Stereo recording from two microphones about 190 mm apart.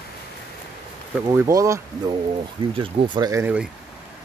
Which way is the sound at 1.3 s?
15° right (ahead or behind).